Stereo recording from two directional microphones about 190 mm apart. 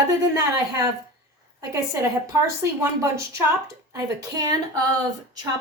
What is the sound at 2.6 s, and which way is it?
Speech, 15° right (ahead or behind).